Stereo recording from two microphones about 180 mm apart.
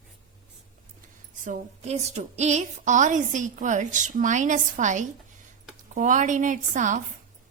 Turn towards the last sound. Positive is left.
turn(degrees=-45)  # may be behind; listen again after turning